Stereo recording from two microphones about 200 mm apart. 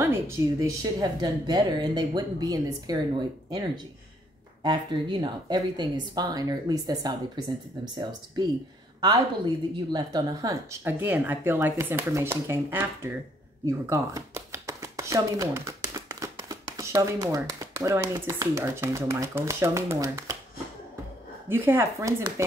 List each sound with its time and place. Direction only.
0.0 s speech: 15° right (ahead or behind)
4.6 s speech: 25° right (ahead or behind)
9.9 s speech: 20° right (ahead or behind)
21.5 s speech: 10° right (ahead or behind)